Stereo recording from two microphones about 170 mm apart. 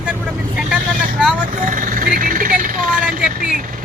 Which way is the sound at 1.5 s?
50° right (ahead or behind).